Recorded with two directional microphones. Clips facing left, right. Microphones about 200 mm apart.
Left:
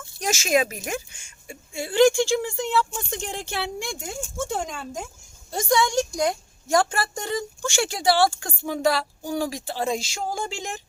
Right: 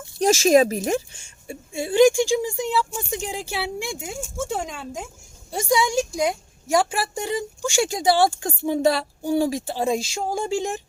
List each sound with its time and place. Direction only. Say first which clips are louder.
0.2 s speech: right 7 dB; 35° right (ahead or behind)